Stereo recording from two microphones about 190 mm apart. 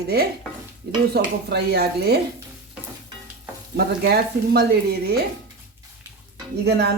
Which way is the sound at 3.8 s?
60° right (ahead or behind).